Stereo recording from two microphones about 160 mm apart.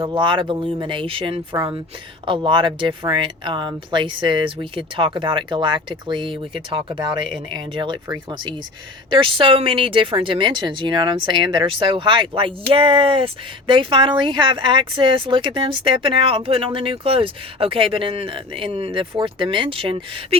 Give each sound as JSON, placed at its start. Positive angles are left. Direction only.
{"t": 0.0, "sound": "speech", "side_deg": -30}